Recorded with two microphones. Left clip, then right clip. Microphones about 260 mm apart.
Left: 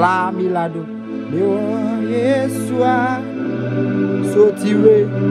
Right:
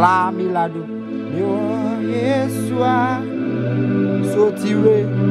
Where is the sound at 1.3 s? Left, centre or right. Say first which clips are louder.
Left 3 dB; right.